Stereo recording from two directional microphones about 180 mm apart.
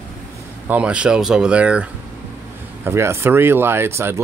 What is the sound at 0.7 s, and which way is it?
Speech, 5° right (ahead or behind).